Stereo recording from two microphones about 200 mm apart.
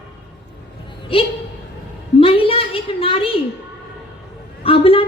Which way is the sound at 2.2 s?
30° left (ahead or behind).